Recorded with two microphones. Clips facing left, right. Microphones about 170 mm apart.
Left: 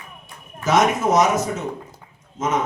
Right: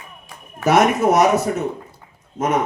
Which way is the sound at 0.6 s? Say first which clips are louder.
Right 3 dB; 60° right (ahead or behind).